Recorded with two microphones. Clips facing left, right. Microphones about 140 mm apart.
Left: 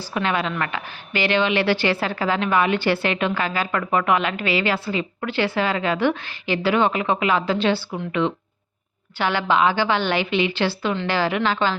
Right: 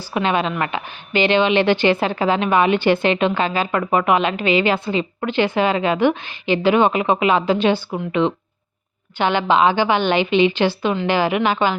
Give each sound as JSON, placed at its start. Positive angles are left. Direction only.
{"t": 0.1, "sound": "a woman's voice", "side_deg": -20}